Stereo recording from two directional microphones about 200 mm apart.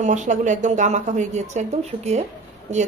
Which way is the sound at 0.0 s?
35° right (ahead or behind).